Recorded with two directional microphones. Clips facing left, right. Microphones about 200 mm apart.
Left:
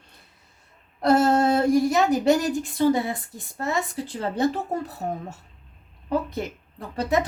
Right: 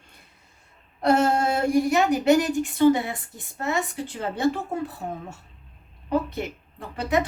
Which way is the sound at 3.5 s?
40° left (ahead or behind).